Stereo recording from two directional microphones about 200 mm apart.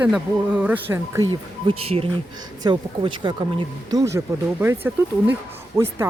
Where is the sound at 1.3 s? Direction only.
25° right (ahead or behind).